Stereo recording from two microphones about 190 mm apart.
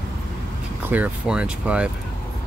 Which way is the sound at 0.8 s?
10° right (ahead or behind).